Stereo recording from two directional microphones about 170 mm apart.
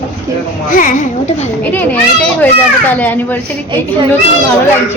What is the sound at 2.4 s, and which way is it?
Speech, 10° left (ahead or behind).